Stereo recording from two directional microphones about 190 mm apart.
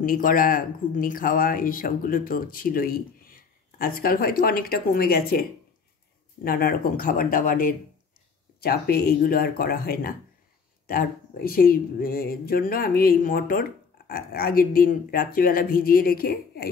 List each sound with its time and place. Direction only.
0.0 s speech: 45° left (ahead or behind)